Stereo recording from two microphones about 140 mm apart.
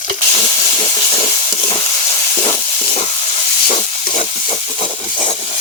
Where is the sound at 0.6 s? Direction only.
35° left (ahead or behind).